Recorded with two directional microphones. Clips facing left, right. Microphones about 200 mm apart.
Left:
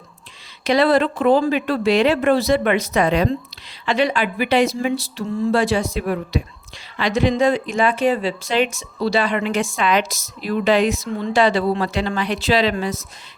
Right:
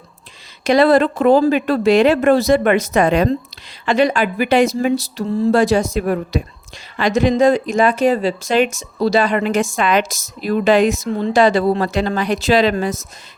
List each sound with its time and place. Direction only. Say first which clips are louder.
0.6 s speech: right 4 dB; 45° right (ahead or behind)